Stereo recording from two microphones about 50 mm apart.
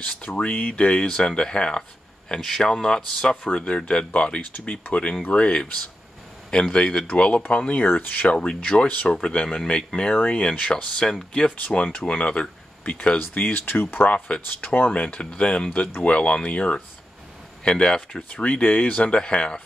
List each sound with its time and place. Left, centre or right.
0.0 s speech: left
1.8 s speech: centre; by 8.3 s left
8.3 s speech: left
14.1 s speech: left
14.6 s speech: left
14.9 s speech: left